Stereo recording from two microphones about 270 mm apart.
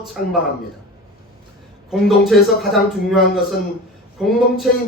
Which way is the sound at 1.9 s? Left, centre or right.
Centre.